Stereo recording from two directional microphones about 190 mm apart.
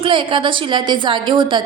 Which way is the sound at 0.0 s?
25° right (ahead or behind).